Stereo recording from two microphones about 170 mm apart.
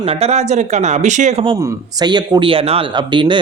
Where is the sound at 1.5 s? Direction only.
20° right (ahead or behind).